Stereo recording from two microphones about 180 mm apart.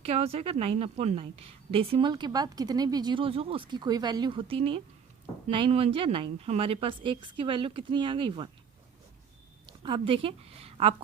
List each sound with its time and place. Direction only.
0.0 s a woman's voice: 35° right (ahead or behind)
9.6 s a woman's voice: 25° right (ahead or behind)